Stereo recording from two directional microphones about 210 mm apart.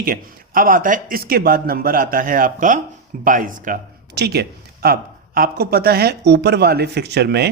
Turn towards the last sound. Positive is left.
turn(degrees=-50)  # may be behind; listen again after turning